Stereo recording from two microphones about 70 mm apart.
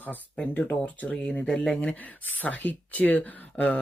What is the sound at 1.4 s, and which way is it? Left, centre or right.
Speech, centre.